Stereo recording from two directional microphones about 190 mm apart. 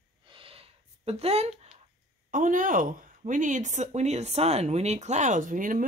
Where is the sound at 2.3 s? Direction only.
45° right (ahead or behind).